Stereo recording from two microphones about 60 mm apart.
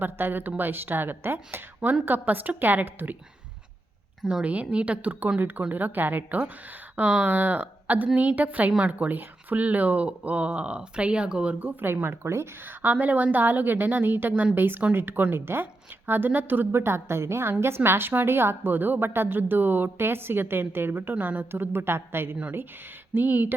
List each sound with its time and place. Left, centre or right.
0.0 s a woman's voice: right
1.8 s a woman's voice: right
4.4 s speech: right
5.4 s a woman's voice: right; by 11.5 s centre
11.6 s a woman's voice: right
12.6 s a woman's voice: right
16.8 s a woman's voice: right